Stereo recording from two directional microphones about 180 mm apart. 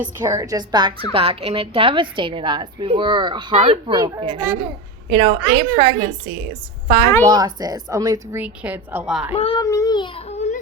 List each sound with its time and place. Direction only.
0.0 s a woman's voice: 15° right (ahead or behind)
3.5 s speech: 40° right (ahead or behind)
3.8 s a woman's voice: 20° right (ahead or behind)
4.2 s a woman's voice: 30° right (ahead or behind); by 9.3 s 5° right (ahead or behind)
9.3 s a child's voice: 35° left (ahead or behind)
9.6 s a child's voice: 15° left (ahead or behind)
10.2 s a sound: 35° left (ahead or behind)